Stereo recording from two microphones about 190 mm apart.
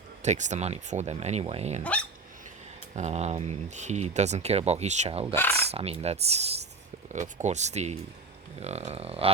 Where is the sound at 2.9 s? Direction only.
35° right (ahead or behind).